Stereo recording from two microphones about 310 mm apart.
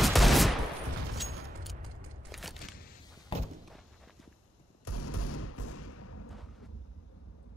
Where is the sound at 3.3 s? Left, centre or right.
Centre.